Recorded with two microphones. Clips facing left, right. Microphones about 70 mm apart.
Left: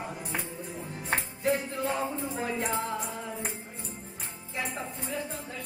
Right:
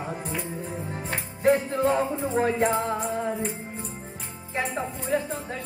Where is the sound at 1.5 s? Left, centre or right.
Right.